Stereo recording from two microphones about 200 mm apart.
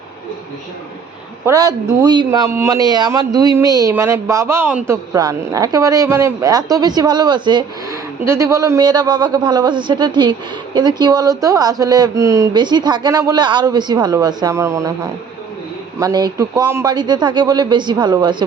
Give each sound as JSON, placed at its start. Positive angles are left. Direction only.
{"t": 1.5, "sound": "a man's voice", "side_deg": -20}
{"t": 16.0, "sound": "a man's voice", "side_deg": -20}